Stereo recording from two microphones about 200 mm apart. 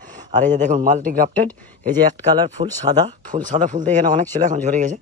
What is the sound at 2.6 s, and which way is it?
Speech, 35° right (ahead or behind).